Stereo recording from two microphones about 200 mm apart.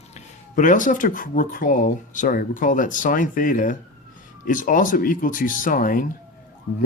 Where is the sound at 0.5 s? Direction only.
40° left (ahead or behind).